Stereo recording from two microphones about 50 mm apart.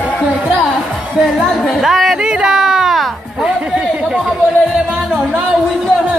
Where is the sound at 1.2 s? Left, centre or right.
Centre.